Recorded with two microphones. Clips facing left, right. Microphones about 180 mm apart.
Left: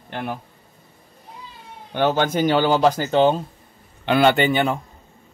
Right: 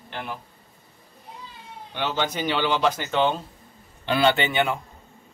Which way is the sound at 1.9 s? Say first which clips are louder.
Left 7 dB; 50° left (ahead or behind).